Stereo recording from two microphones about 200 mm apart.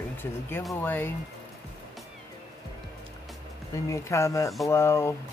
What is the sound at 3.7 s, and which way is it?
Speech, 15° left (ahead or behind).